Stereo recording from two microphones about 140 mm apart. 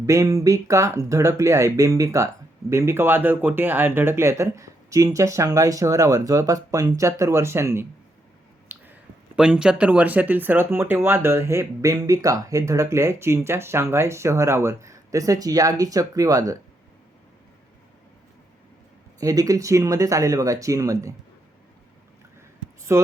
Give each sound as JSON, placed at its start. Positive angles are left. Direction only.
{"t": 0.0, "sound": "speech", "side_deg": -20}
{"t": 19.2, "sound": "speech", "side_deg": -25}
{"t": 22.9, "sound": "speech", "side_deg": -20}